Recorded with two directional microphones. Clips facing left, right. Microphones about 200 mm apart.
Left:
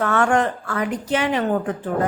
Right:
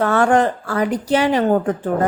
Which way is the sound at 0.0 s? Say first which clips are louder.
Right 4 dB; 35° right (ahead or behind).